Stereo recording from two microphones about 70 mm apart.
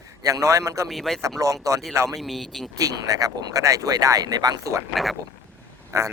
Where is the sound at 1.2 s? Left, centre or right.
Right.